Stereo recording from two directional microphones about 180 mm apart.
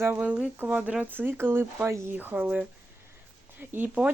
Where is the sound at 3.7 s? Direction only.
10° right (ahead or behind).